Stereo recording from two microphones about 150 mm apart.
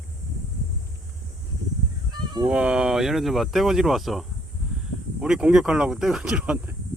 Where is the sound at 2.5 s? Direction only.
5° right (ahead or behind).